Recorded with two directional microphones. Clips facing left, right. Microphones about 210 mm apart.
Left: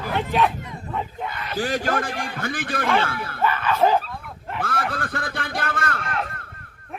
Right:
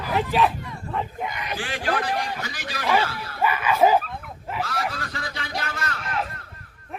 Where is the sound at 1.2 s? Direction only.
15° right (ahead or behind).